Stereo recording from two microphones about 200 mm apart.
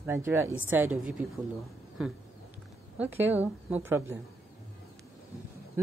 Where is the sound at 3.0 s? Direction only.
10° right (ahead or behind).